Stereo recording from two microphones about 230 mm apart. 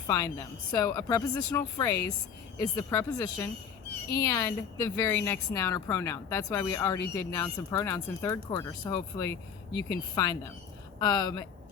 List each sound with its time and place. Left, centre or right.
0.1 s a woman's voice: centre